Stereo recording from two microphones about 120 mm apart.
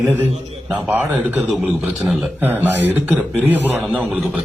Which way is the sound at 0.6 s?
10° right (ahead or behind).